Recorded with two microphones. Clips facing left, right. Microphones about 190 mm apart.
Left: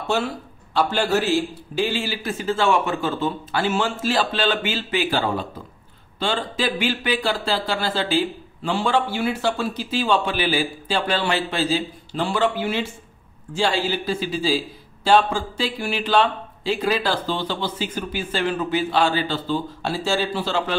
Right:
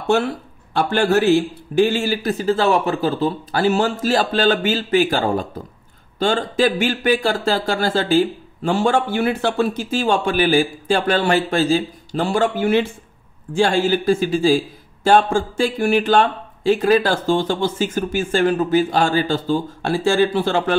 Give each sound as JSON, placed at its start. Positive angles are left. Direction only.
{"t": 0.7, "sound": "speech", "side_deg": -50}